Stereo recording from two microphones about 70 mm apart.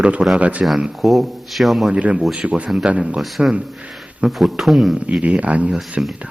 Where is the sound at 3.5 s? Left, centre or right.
Centre.